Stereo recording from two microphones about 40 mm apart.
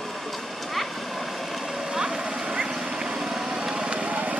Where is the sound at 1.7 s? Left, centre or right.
Centre.